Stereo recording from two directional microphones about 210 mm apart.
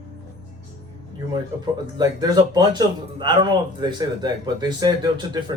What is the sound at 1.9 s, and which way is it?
Speech, 20° right (ahead or behind).